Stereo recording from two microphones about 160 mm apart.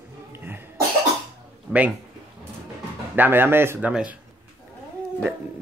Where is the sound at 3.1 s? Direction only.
10° right (ahead or behind).